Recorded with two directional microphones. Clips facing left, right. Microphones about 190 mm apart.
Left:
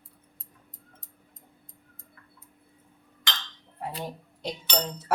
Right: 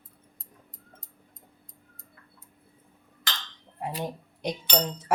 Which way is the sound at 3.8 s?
20° right (ahead or behind).